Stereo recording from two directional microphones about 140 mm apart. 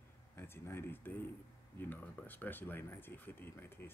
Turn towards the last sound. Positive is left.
turn(degrees=15)  # may be behind; listen again after turning